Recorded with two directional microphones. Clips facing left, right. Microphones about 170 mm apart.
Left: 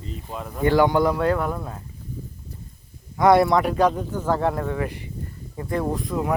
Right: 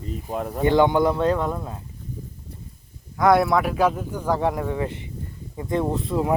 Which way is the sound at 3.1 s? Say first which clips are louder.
Left 1 dB; centre (ahead or behind).